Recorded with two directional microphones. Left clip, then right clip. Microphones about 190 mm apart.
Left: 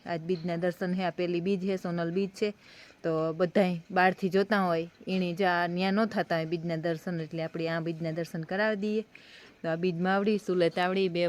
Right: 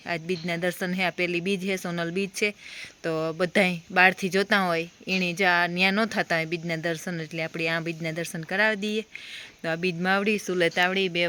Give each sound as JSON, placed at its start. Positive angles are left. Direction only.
{"t": 0.1, "sound": "speech", "side_deg": 0}